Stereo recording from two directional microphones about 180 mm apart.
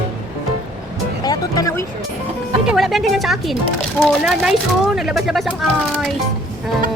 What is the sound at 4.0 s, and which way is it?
Speech, centre (ahead or behind).